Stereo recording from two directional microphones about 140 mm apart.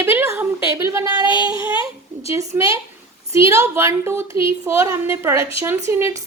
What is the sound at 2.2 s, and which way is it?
A woman's voice, 20° right (ahead or behind).